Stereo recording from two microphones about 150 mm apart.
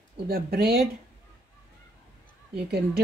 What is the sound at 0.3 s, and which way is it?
Speech, 90° right.